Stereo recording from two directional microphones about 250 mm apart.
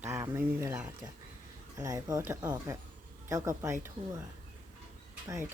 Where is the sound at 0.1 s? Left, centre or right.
Centre.